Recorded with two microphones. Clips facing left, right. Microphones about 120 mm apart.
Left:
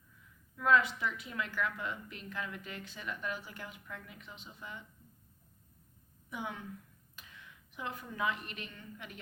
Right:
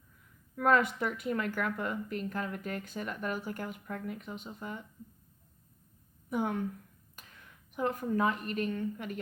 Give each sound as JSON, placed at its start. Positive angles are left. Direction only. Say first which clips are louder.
{"t": 0.5, "sound": "a woman's voice", "louder": "right 2 dB", "side_deg": -50}
{"t": 6.3, "sound": "a woman's voice", "louder": "right 9 dB", "side_deg": -50}